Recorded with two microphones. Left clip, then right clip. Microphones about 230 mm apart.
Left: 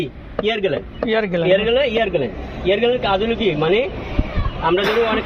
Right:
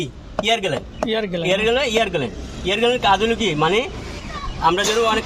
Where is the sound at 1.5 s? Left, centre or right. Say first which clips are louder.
Left 1 dB; right.